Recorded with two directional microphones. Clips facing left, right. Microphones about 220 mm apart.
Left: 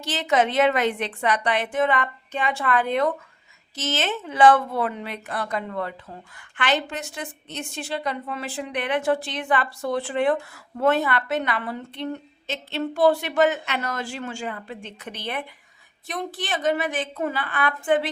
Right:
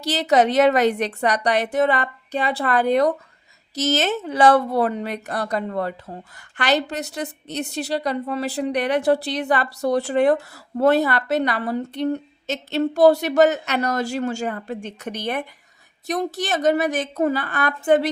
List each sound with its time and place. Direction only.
0.0 s a woman's voice: 40° right (ahead or behind)